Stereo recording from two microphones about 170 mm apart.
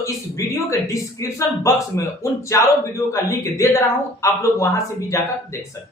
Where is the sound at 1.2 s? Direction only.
15° left (ahead or behind).